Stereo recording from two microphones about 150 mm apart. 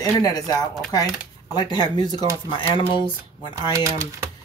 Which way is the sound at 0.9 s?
25° left (ahead or behind).